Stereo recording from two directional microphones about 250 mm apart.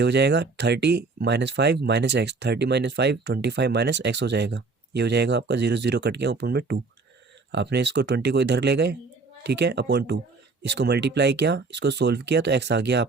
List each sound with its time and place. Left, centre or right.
0.0 s speech: right